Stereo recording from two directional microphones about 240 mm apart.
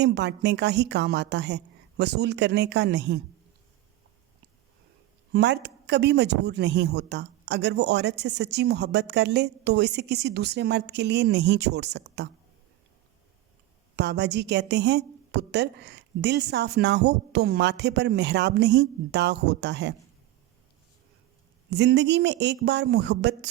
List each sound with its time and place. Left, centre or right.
0.0 s speech: right
5.3 s speech: right
13.9 s speech: right
21.7 s speech: right